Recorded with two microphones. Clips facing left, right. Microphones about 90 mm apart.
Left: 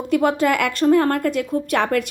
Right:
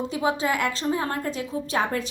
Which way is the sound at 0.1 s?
60° left (ahead or behind).